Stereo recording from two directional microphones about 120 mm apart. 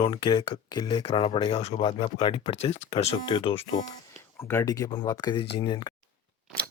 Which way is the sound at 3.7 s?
35° left (ahead or behind).